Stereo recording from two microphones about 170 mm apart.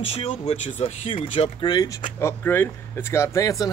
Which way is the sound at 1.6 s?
25° left (ahead or behind).